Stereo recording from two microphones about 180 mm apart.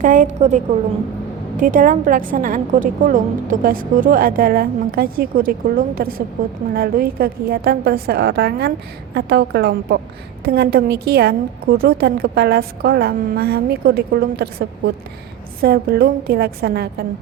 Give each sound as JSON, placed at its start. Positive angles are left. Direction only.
{"t": 0.0, "sound": "a woman's voice", "side_deg": -45}